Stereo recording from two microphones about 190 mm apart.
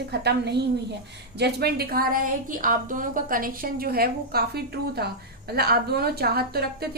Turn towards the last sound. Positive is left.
turn(degrees=-55)  # may be behind; listen again after turning